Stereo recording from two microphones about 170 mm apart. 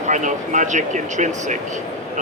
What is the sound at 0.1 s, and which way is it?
Speech, 45° right (ahead or behind).